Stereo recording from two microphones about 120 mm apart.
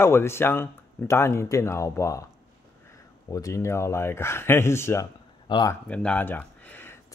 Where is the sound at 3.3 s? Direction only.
25° left (ahead or behind).